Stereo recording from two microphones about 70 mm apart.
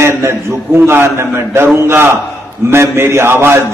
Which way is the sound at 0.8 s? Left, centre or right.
Right.